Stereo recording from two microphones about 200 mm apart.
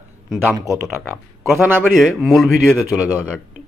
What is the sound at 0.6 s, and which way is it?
Speech, 15° right (ahead or behind).